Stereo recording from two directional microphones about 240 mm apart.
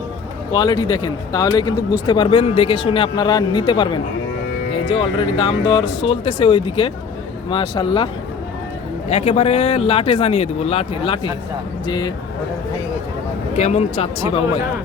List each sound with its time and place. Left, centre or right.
0.5 s speech: centre
13.6 s speech: left